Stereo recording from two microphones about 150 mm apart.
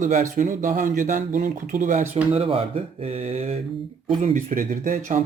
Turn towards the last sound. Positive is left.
turn(degrees=-55)  # may be behind; listen again after turning